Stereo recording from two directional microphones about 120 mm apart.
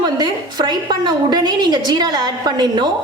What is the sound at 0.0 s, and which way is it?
A woman's voice, 35° right (ahead or behind).